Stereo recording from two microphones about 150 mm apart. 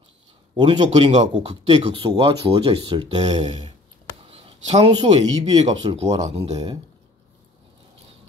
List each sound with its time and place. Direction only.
0.6 s speech: 30° right (ahead or behind)
0.8 s speech: 45° right (ahead or behind)
4.3 s a sound: 40° right (ahead or behind)
5.0 s speech: 45° right (ahead or behind)